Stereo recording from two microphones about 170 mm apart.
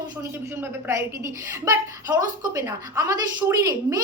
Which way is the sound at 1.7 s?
20° right (ahead or behind).